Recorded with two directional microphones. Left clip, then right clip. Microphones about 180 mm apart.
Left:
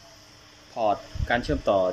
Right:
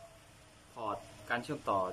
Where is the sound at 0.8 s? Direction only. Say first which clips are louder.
Left 14 dB; 20° left (ahead or behind).